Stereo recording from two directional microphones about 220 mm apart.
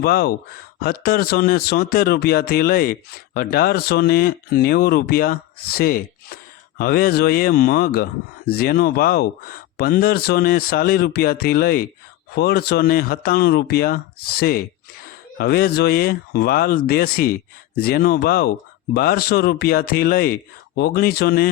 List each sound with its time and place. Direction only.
0.0 s speech: 45° left (ahead or behind)